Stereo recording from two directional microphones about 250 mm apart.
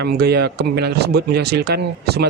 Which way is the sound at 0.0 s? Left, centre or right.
Right.